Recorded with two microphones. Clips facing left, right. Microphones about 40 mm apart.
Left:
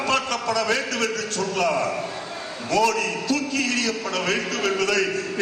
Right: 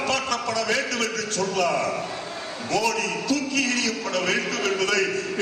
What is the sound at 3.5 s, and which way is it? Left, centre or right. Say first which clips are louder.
Speech: even; right.